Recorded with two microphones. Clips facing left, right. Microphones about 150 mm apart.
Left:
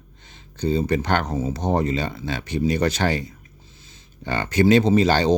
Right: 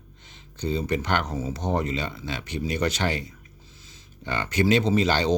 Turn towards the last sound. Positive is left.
turn(degrees=40)  # may be behind; listen again after turning